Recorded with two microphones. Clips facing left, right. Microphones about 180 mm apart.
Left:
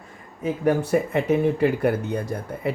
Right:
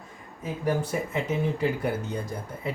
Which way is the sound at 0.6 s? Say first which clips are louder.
Left 6 dB; 60° left (ahead or behind).